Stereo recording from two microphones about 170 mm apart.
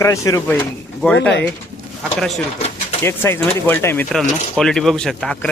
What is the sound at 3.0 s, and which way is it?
A man's voice, 15° left (ahead or behind).